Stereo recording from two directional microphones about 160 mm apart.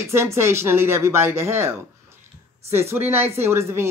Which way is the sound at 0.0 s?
15° right (ahead or behind).